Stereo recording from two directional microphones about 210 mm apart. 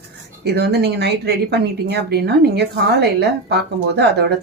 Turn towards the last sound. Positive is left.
turn(degrees=-55)  # may be behind; listen again after turning